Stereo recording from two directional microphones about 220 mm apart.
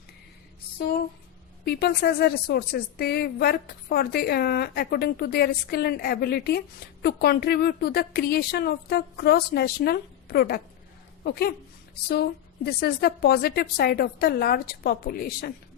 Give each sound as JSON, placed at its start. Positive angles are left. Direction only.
{"t": 1.6, "sound": "a woman's voice", "side_deg": 45}